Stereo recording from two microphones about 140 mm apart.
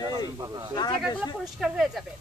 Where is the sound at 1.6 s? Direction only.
5° right (ahead or behind).